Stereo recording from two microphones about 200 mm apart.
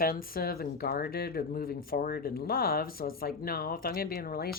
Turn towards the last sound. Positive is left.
turn(degrees=50)  # may be behind; listen again after turning